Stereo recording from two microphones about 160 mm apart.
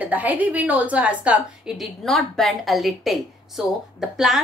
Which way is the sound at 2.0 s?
Centre (ahead or behind).